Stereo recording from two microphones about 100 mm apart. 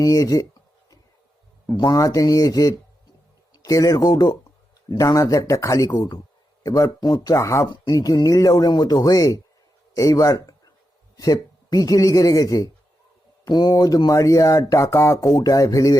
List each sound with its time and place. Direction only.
0.0 s speech: 35° left (ahead or behind)
1.7 s speech: 40° left (ahead or behind)